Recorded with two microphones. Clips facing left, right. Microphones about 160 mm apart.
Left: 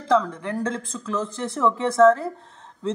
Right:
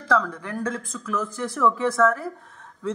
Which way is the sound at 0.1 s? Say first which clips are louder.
Left 3 dB; 25° left (ahead or behind).